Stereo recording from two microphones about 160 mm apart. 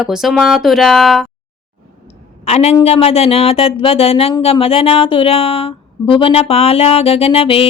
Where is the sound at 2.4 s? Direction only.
40° left (ahead or behind).